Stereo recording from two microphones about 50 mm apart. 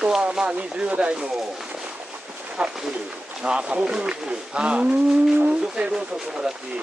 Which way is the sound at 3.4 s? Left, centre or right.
Centre.